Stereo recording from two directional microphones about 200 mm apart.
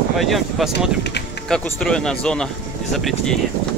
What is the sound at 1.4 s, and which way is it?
Speech, centre (ahead or behind).